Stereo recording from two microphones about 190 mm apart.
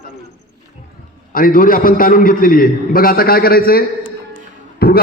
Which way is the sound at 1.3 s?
45° left (ahead or behind).